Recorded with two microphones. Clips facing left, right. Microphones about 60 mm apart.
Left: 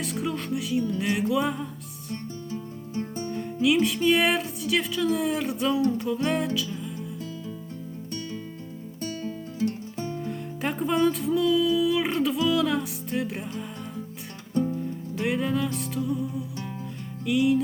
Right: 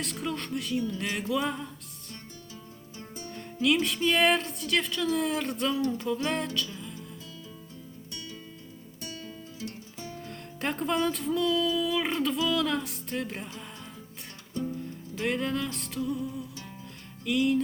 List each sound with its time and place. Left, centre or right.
0.0 s music: centre
2.5 s music: left
3.2 s music: centre
9.0 s music: left
10.2 s music: centre
14.5 s music: left
14.8 s music: centre